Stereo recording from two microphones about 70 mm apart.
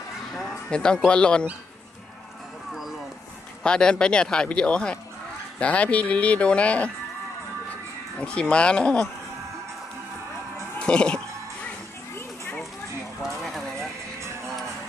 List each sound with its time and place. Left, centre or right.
0.7 s speech: centre
3.6 s speech: centre
8.2 s speech: centre
10.8 s speech: centre
13.4 s horse: centre